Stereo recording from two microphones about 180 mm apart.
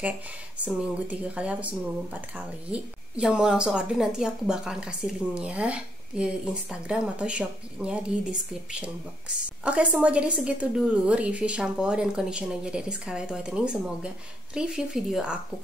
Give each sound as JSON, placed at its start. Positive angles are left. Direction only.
{"t": 0.7, "sound": "speech", "side_deg": -5}